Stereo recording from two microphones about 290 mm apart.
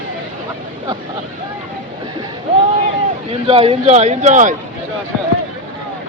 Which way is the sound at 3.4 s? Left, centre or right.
Centre.